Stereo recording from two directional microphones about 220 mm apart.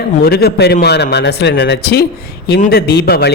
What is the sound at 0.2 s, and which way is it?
Speech, 45° left (ahead or behind).